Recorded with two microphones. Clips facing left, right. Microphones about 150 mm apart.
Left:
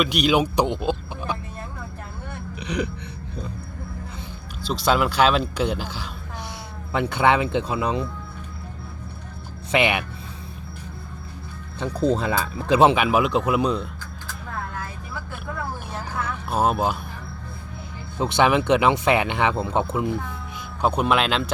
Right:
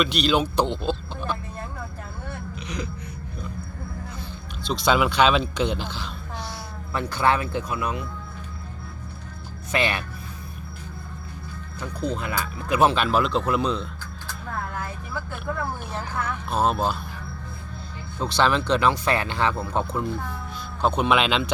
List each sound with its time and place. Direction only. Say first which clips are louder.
0.0 s speech: left 2 dB; 10° left (ahead or behind)
4.6 s speech: even; centre (ahead or behind)
6.9 s speech: left 3 dB; 20° left (ahead or behind)
9.7 s speech: left 4 dB; 20° left (ahead or behind)
11.9 s speech: left 7 dB; 40° left (ahead or behind)
12.2 s speech: left 5 dB; 30° left (ahead or behind)
12.9 s speech: left 2 dB; 15° left (ahead or behind)
16.5 s speech: left 2 dB; 10° left (ahead or behind)
18.2 s speech: left 3 dB; 20° left (ahead or behind)
20.8 s speech: even; 5° left (ahead or behind)